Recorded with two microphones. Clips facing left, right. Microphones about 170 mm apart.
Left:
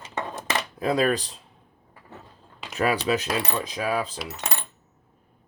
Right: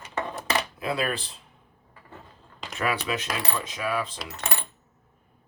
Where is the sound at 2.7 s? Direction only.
40° left (ahead or behind).